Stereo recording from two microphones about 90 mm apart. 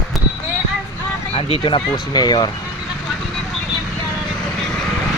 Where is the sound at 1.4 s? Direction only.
90° left.